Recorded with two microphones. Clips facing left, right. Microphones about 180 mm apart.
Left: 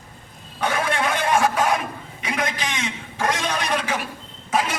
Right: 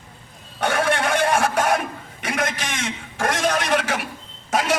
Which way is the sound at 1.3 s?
75° right (ahead or behind).